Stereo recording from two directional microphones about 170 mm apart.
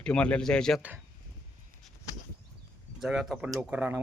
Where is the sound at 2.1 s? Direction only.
20° left (ahead or behind).